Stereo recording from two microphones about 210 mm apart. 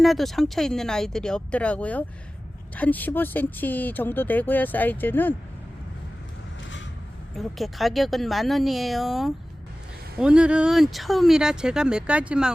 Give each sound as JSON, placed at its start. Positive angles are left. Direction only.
{"t": 0.0, "sound": "speech", "side_deg": 0}
{"t": 7.3, "sound": "speech", "side_deg": 0}